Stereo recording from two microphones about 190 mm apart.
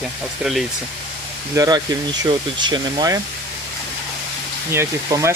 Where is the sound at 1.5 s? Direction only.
20° right (ahead or behind).